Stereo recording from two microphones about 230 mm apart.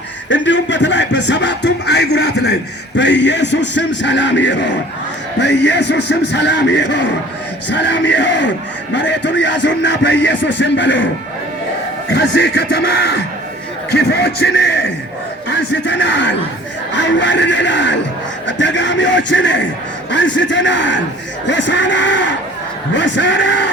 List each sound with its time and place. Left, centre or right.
0.3 s music: left
12.1 s music: left
15.4 s speech: left
16.9 s music: left